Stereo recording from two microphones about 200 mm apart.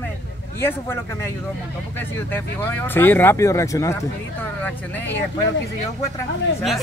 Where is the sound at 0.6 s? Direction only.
10° left (ahead or behind).